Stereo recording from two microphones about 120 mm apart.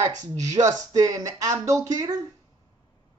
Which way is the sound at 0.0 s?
30° right (ahead or behind).